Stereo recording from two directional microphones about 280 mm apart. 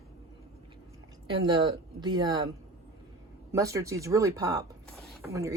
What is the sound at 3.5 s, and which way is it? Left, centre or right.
Speech, centre.